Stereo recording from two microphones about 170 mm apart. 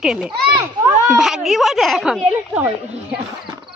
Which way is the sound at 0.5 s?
25° right (ahead or behind).